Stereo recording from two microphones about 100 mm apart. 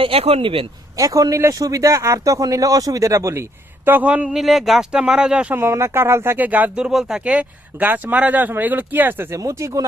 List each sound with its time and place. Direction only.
0.0 s speech: 80° right; by 0.7 s 60° right (ahead or behind)
0.9 s speech: 35° right (ahead or behind)
3.8 s speech: 15° right (ahead or behind)
5.5 s speech: 25° right (ahead or behind)